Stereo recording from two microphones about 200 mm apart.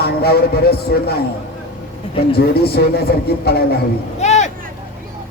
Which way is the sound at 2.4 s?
55° left (ahead or behind).